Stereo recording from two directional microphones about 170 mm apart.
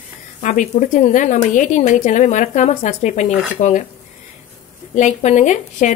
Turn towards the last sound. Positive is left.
turn(degrees=45)  # may be behind; listen again after turning